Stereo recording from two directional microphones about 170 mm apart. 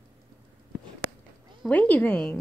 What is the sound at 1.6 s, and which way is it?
Speech, 10° left (ahead or behind).